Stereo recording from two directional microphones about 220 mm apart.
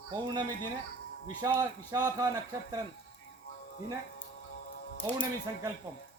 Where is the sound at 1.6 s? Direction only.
15° right (ahead or behind).